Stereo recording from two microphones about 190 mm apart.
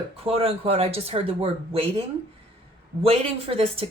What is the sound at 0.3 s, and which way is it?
Speech, 30° right (ahead or behind).